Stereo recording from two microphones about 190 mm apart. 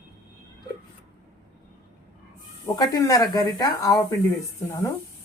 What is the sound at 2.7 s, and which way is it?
Speech, 20° left (ahead or behind).